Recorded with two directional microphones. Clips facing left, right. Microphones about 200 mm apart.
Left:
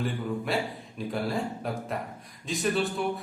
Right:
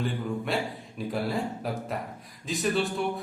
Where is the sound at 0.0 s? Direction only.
Centre (ahead or behind).